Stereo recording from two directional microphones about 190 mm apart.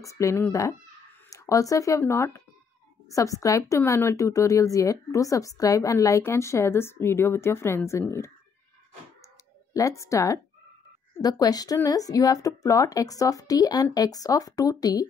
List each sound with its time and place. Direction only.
0.0 s a woman's voice: 15° left (ahead or behind)
9.8 s a woman's voice: 15° left (ahead or behind)